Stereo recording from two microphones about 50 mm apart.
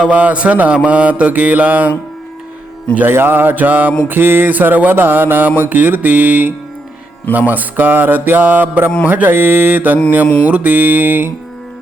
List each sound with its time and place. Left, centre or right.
0.0 s mantra: right
3.1 s mantra: right